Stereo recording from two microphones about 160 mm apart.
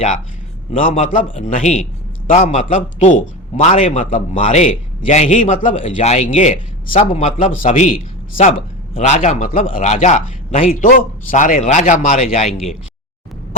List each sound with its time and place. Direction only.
0.9 s a man's voice: 55° left (ahead or behind)
9.0 s a man's voice: 50° left (ahead or behind)